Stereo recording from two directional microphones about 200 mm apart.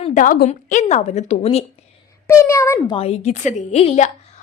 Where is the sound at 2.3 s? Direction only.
15° left (ahead or behind).